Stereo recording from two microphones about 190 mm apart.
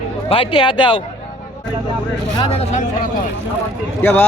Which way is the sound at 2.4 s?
30° left (ahead or behind).